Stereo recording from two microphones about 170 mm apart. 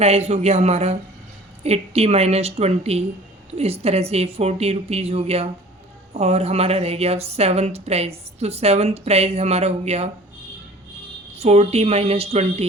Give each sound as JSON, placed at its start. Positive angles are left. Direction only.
{"t": 0.0, "sound": "a woman's voice", "side_deg": -40}
{"t": 11.3, "sound": "a woman's voice", "side_deg": -35}